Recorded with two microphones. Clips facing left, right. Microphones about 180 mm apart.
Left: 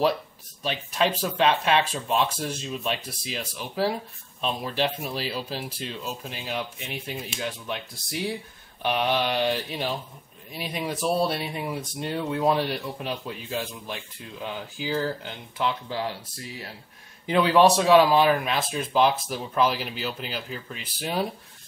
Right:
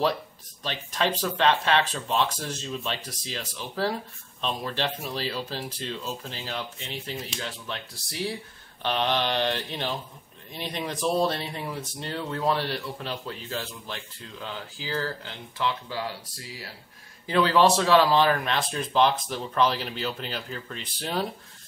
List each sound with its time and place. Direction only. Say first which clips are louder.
0.7 s speech: left 2 dB; 10° left (ahead or behind)
17.3 s speech: left 2 dB; 15° left (ahead or behind)